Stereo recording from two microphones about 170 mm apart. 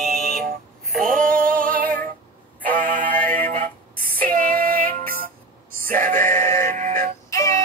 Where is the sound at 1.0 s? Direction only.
50° right (ahead or behind).